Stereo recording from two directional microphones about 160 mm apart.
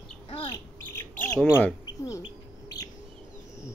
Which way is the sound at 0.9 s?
15° left (ahead or behind).